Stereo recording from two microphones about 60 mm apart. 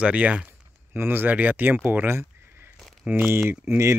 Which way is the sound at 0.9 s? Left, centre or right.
Right.